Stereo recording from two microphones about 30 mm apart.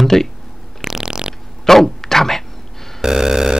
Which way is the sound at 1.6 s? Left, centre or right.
Centre.